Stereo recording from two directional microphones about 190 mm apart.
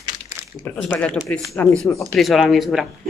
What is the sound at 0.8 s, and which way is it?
A woman's voice, 5° left (ahead or behind).